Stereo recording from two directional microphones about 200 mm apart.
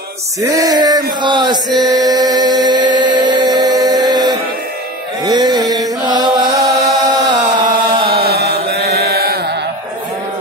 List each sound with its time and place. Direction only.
0.4 s a sound: 15° right (ahead or behind)
1.2 s chant: 20° right (ahead or behind)
7.2 s music: 20° right (ahead or behind)
8.1 s chant: 50° right (ahead or behind)